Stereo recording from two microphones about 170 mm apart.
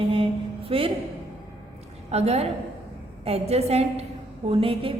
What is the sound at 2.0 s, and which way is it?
A woman's voice, 40° right (ahead or behind).